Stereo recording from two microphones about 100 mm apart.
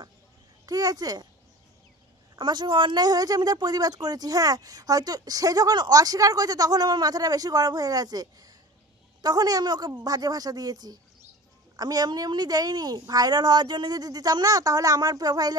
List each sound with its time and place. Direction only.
0.7 s speech: 40° right (ahead or behind)
2.3 s speech: 50° right (ahead or behind)